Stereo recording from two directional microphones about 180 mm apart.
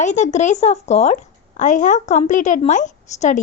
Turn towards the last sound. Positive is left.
turn(degrees=40)  # may be behind; listen again after turning